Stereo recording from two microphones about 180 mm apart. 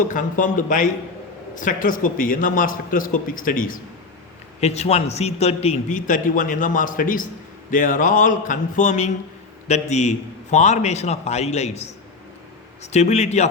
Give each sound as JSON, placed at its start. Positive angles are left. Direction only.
{"t": 0.0, "sound": "a man's voice", "side_deg": 45}
{"t": 4.6, "sound": "a man's voice", "side_deg": 35}